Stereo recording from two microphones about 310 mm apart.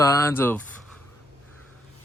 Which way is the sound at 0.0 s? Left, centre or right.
Centre.